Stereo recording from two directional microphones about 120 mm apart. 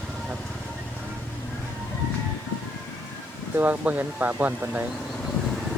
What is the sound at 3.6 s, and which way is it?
Speech, 15° right (ahead or behind).